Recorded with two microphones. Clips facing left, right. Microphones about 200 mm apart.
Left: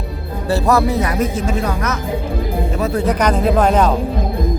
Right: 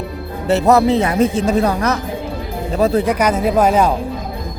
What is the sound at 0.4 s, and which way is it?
Speech, 20° right (ahead or behind).